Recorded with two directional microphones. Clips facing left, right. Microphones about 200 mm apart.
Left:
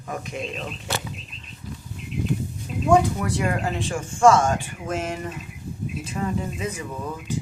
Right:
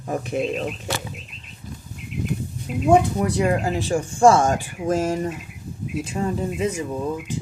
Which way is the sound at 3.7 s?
35° right (ahead or behind).